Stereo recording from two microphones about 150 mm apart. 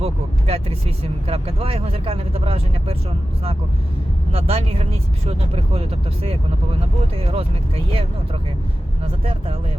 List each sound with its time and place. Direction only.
0.0 s speech: 40° right (ahead or behind)
4.3 s speech: 40° right (ahead or behind)